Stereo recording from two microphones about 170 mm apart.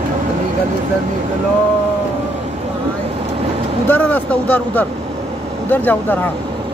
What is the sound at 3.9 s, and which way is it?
Speech, 10° left (ahead or behind).